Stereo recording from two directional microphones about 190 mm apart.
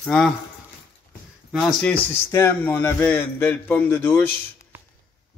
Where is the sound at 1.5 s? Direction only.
Centre (ahead or behind).